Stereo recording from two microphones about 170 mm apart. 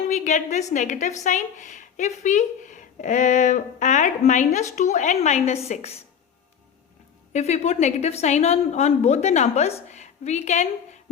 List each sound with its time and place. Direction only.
0.1 s a woman's voice: 45° left (ahead or behind)
7.3 s a woman's voice: 40° left (ahead or behind)